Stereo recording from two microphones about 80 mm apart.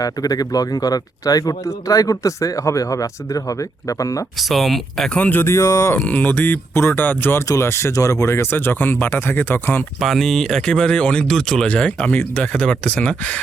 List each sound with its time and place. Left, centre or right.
0.0 s speech: left
4.4 s speech: centre
5.1 s speech: centre
5.4 s speech: left
5.9 s speech: left
7.4 s speech: left
10.0 s speech: centre